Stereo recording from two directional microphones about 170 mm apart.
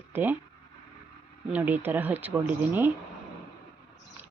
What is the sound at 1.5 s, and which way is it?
A woman's voice, 10° right (ahead or behind).